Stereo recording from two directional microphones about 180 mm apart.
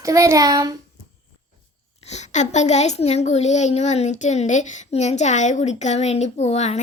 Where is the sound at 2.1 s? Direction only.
40° left (ahead or behind).